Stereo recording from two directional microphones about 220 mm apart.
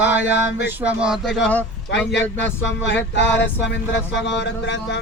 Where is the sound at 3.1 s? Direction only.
55° left (ahead or behind).